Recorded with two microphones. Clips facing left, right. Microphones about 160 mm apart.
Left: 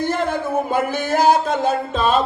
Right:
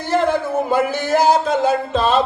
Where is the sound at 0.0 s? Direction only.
50° left (ahead or behind).